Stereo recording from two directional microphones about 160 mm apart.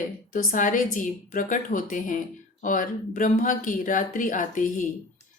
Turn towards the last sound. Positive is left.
turn(degrees=55)  # may be behind; listen again after turning